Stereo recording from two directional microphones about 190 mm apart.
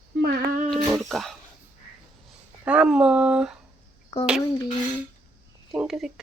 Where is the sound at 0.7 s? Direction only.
Centre (ahead or behind).